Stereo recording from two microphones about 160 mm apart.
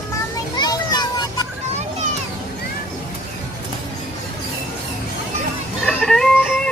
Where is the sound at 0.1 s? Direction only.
25° left (ahead or behind).